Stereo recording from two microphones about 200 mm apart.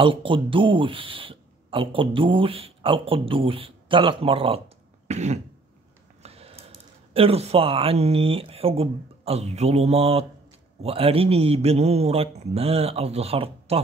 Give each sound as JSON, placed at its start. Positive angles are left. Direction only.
{"t": 0.0, "sound": "speech", "side_deg": -25}
{"t": 5.0, "sound": "throat clearing", "side_deg": -35}
{"t": 6.2, "sound": "a sound", "side_deg": -30}
{"t": 7.2, "sound": "speech", "side_deg": -30}